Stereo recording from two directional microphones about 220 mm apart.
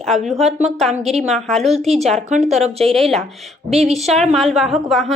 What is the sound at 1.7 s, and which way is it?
A woman's voice, 30° right (ahead or behind).